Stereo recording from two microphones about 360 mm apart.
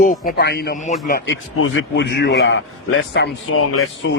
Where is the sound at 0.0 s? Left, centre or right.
Left.